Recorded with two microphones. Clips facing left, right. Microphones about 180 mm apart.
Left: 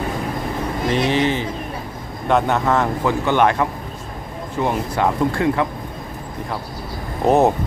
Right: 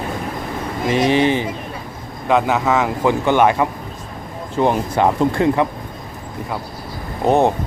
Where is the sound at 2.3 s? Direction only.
Centre (ahead or behind).